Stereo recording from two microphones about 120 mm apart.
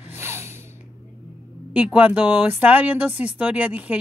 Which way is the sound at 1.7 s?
10° right (ahead or behind).